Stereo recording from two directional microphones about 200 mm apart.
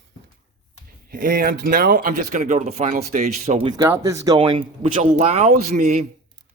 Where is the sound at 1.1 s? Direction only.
45° right (ahead or behind).